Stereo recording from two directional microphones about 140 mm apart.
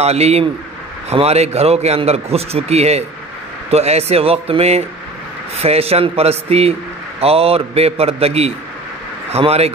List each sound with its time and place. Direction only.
0.0 s speech: 50° right (ahead or behind)